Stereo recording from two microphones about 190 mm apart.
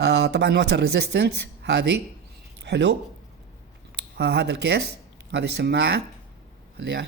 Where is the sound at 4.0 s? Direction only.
60° right (ahead or behind).